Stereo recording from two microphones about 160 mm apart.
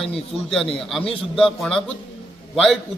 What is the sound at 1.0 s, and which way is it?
Speech, 35° left (ahead or behind).